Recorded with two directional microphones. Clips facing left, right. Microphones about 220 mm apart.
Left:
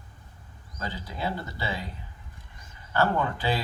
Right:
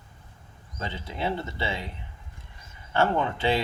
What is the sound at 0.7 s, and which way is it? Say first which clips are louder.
Speech: right 1 dB; 25° right (ahead or behind).